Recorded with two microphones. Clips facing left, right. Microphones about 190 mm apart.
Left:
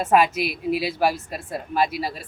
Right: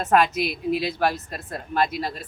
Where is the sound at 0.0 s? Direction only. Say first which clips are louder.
Left 1 dB; 5° left (ahead or behind).